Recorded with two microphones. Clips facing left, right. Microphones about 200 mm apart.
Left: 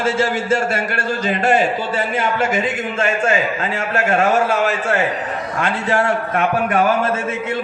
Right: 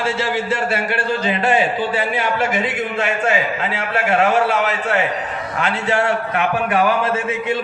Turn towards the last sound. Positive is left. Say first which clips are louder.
# left 1 dB
turn(degrees=45)  # may be behind; listen again after turning